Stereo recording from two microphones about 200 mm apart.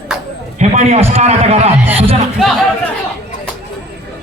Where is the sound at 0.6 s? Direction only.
35° right (ahead or behind).